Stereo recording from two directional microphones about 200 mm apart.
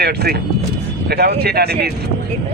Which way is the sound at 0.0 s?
50° right (ahead or behind).